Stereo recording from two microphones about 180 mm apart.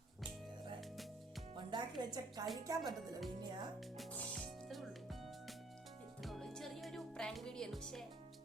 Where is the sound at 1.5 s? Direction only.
25° right (ahead or behind).